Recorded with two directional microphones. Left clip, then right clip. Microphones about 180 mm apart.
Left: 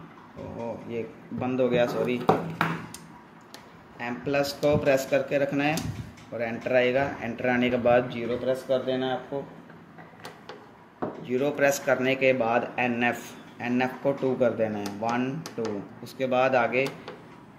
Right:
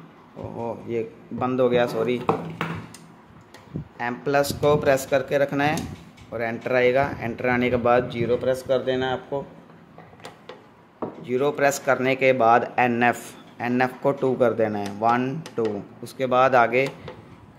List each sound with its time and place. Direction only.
0.8 s speech: 40° right (ahead or behind)
4.0 s speech: 40° right (ahead or behind)
11.2 s speech: 30° right (ahead or behind)